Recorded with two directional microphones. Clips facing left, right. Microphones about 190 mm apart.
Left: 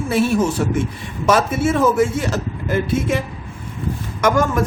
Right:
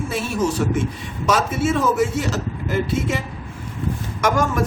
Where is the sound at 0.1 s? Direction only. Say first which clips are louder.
Left 7 dB; 55° left (ahead or behind).